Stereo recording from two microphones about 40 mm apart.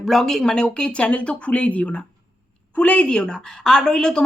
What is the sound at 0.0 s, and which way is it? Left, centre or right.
Speech, centre.